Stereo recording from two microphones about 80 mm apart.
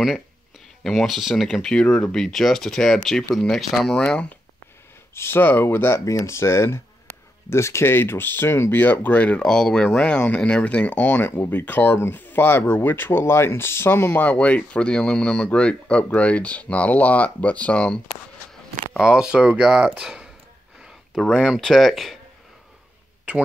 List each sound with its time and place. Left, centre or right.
0.8 s speech: centre
5.1 s speech: left
9.4 s speech: centre
18.9 s speech: centre
21.2 s speech: centre